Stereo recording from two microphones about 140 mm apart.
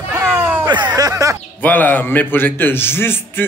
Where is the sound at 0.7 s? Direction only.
30° right (ahead or behind).